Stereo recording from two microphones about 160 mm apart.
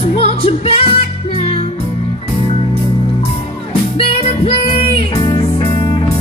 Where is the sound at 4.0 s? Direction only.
40° left (ahead or behind).